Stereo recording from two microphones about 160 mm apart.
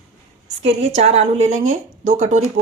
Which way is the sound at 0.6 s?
45° right (ahead or behind).